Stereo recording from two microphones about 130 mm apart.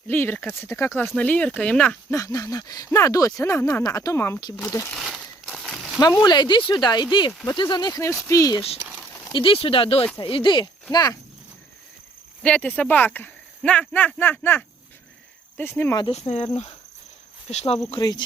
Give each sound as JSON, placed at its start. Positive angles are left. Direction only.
{"t": 0.1, "sound": "speech", "side_deg": 15}
{"t": 2.1, "sound": "speech", "side_deg": 25}
{"t": 4.9, "sound": "a sound", "side_deg": 0}
{"t": 6.2, "sound": "speech", "side_deg": 35}
{"t": 8.8, "sound": "crumpling", "side_deg": -10}
{"t": 9.2, "sound": "speech", "side_deg": 40}
{"t": 12.4, "sound": "speech", "side_deg": 10}
{"t": 16.1, "sound": "speech", "side_deg": 55}
{"t": 17.5, "sound": "speech", "side_deg": 60}
{"t": 17.9, "sound": "speech", "side_deg": 35}